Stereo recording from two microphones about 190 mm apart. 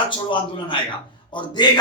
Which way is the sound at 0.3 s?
25° left (ahead or behind).